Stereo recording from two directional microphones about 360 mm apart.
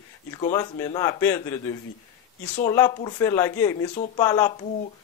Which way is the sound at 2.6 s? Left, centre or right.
Centre.